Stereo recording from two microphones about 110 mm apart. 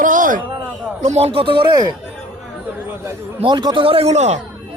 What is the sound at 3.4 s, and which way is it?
Speech, 45° right (ahead or behind).